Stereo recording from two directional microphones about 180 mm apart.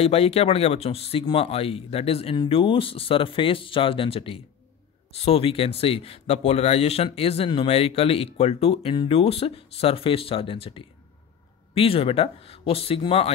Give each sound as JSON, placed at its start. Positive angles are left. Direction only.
{"t": 0.0, "sound": "speech", "side_deg": 35}